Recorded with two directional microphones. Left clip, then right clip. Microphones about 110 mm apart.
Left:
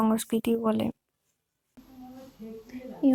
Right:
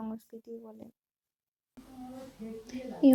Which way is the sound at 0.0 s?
20° left (ahead or behind).